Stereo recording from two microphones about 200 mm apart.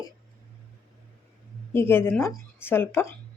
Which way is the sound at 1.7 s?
10° left (ahead or behind).